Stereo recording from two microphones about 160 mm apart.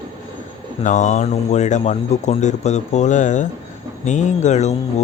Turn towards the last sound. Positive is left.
turn(degrees=45)  # may be behind; listen again after turning